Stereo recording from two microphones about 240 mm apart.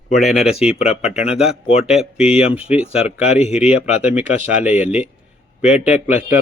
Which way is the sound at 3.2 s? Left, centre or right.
Left.